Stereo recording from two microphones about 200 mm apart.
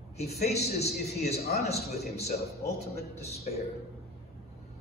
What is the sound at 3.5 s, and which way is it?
Speech, 35° left (ahead or behind).